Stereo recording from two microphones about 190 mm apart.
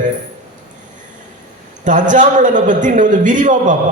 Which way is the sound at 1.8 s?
40° right (ahead or behind).